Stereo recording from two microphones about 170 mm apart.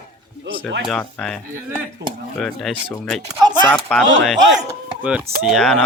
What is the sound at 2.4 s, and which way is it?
Speech, centre (ahead or behind).